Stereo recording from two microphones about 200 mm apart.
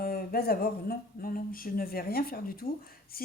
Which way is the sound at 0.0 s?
50° left (ahead or behind).